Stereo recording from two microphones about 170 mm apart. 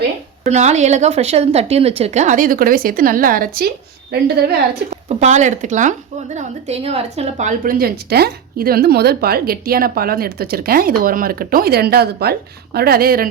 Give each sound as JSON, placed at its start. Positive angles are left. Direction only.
{"t": 0.4, "sound": "a woman's voice", "side_deg": -40}
{"t": 4.1, "sound": "a woman's voice", "side_deg": -75}
{"t": 5.0, "sound": "a woman's voice", "side_deg": -45}